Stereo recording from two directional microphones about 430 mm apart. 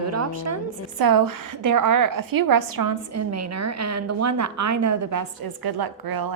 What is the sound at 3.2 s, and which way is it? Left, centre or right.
Speech, right.